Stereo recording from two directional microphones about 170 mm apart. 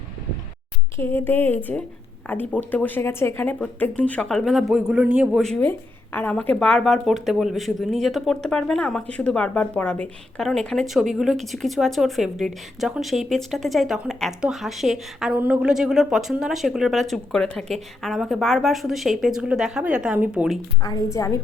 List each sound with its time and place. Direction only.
0.9 s speech: 15° left (ahead or behind); by 5.4 s 5° right (ahead or behind)
5.4 s a woman's voice: 5° left (ahead or behind)
20.8 s a woman's voice: 20° left (ahead or behind)